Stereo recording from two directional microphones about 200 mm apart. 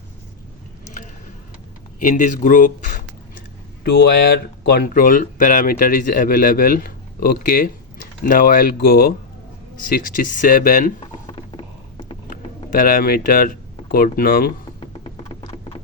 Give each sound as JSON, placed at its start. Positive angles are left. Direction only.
{"t": 2.0, "sound": "speech", "side_deg": 40}
{"t": 11.0, "sound": "music", "side_deg": 25}
{"t": 12.3, "sound": "speech", "side_deg": 45}
{"t": 14.8, "sound": "a sound", "side_deg": 25}